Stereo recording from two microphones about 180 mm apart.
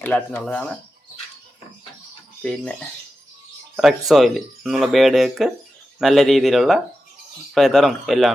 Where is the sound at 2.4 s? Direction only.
5° left (ahead or behind).